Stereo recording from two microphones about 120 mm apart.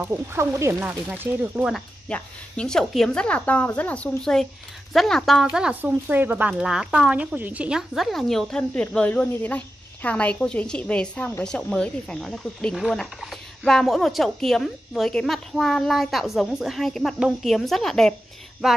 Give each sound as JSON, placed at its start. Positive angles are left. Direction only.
{"t": 0.0, "sound": "speech", "side_deg": -20}
{"t": 0.7, "sound": "speech", "side_deg": -10}
{"t": 2.0, "sound": "a woman's voice", "side_deg": 10}
{"t": 5.8, "sound": "speech", "side_deg": -15}